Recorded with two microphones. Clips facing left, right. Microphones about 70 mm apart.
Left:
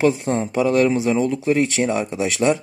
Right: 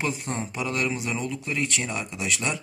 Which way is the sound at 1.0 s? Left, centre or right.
Left.